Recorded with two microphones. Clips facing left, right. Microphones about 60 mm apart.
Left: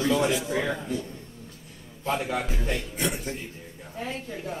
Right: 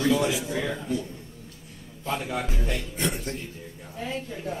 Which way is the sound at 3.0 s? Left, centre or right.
Centre.